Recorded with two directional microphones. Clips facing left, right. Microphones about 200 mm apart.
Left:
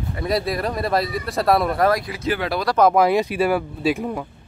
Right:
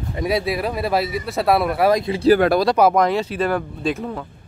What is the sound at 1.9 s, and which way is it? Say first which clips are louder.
Speech: right 7 dB; 25° right (ahead or behind).